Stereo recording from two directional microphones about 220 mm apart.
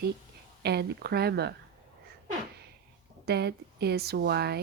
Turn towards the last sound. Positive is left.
turn(degrees=-45)  # may be behind; listen again after turning